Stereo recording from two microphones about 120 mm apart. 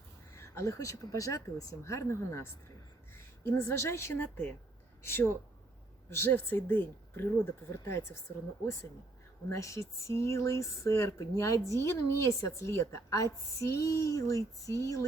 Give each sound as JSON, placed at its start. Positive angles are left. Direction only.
{"t": 0.3, "sound": "a woman's voice", "side_deg": 25}
{"t": 9.5, "sound": "a woman's voice", "side_deg": 25}